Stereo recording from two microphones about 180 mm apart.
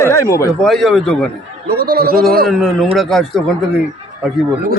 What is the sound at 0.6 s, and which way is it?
Speech, centre (ahead or behind).